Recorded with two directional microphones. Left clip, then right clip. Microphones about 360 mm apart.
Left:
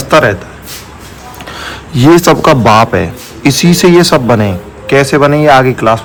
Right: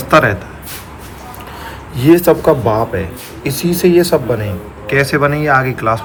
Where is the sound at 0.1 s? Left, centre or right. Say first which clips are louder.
Left 3 dB; centre.